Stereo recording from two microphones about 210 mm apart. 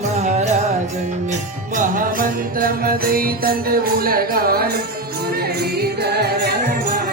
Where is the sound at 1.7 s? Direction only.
40° right (ahead or behind).